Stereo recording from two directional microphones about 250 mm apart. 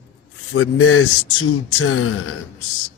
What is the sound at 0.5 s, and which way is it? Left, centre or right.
Speech, left.